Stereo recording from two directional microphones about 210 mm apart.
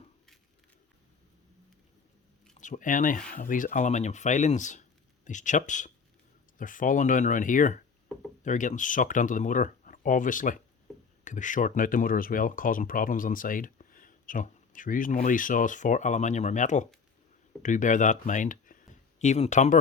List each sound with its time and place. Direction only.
2.6 s speech: 35° left (ahead or behind)